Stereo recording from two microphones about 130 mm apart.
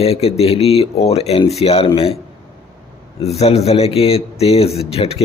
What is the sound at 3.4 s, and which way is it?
Speech, 50° left (ahead or behind).